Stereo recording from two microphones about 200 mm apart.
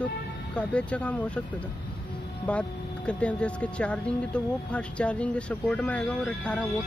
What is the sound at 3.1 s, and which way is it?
Speech, 5° left (ahead or behind).